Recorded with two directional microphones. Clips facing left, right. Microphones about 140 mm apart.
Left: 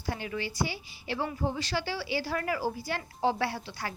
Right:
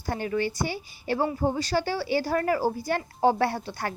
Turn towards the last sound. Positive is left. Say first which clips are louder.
# right 5 dB
turn(degrees=-50)  # may be behind; listen again after turning